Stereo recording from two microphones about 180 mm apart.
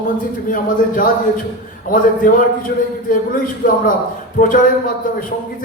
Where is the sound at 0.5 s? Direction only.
50° left (ahead or behind).